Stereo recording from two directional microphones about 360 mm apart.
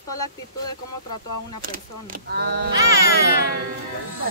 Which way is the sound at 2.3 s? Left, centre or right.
Right.